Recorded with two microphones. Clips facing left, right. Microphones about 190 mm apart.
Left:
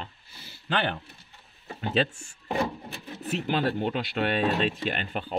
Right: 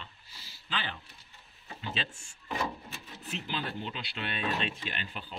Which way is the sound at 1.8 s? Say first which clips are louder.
Left 12 dB; 45° left (ahead or behind).